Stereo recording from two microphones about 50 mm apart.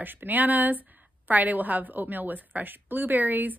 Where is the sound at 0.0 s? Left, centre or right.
Right.